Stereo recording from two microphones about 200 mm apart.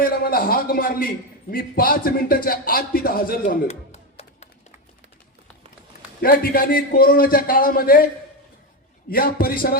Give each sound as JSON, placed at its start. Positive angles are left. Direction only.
{"t": 0.0, "sound": "a man's voice", "side_deg": 45}
{"t": 3.7, "sound": "a sound", "side_deg": 30}
{"t": 6.2, "sound": "speech", "side_deg": 50}